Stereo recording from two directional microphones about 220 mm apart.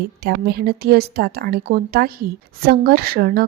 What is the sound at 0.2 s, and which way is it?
A woman's voice, 45° right (ahead or behind).